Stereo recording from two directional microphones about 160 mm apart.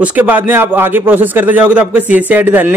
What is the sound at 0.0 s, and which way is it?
Speech, 10° right (ahead or behind).